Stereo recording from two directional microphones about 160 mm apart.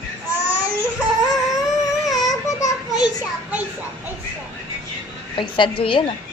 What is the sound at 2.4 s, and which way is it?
Speech, 25° left (ahead or behind).